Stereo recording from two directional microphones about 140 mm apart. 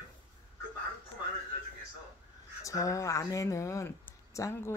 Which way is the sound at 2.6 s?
25° left (ahead or behind).